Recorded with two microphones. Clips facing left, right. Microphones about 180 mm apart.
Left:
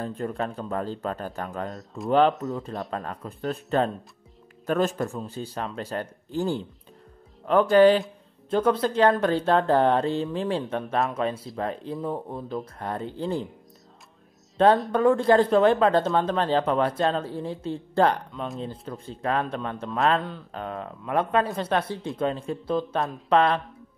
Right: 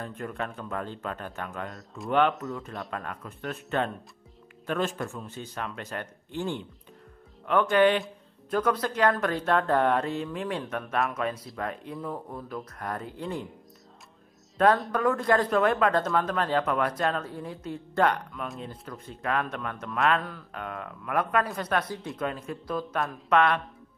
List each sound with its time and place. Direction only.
0.0 s speech: 30° left (ahead or behind)
14.9 s speech: 30° left (ahead or behind)